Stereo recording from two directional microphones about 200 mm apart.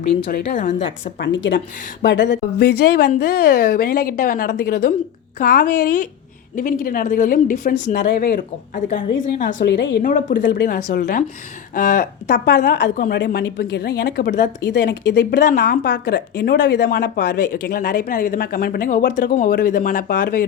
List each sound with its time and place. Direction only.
0.0 s a woman's voice: 30° left (ahead or behind)
0.3 s a woman's voice: 40° left (ahead or behind)
1.2 s a woman's voice: 65° left (ahead or behind)
5.4 s speech: 45° left (ahead or behind)
9.7 s a woman's voice: 65° left (ahead or behind)
10.0 s a woman's voice: 40° left (ahead or behind)
12.7 s a woman's voice: 55° left (ahead or behind)
14.6 s a woman's voice: 60° left (ahead or behind)
15.5 s a woman's voice: 45° left (ahead or behind)